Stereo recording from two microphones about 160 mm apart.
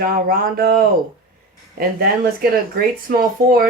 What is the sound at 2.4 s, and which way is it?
Speech, 65° right (ahead or behind).